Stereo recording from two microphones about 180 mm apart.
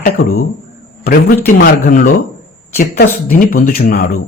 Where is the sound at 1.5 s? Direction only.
55° left (ahead or behind).